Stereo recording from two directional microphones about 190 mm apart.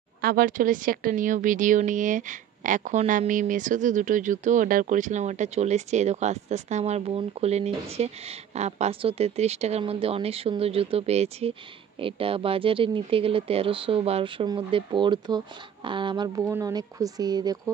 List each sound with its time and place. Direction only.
0.2 s speech: 50° right (ahead or behind); by 17.6 s 20° right (ahead or behind)